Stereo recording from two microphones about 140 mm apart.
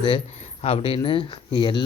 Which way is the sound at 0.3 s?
45° left (ahead or behind).